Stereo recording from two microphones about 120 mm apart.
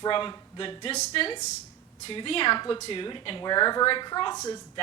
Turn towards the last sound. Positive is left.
turn(degrees=35)  # may be behind; listen again after turning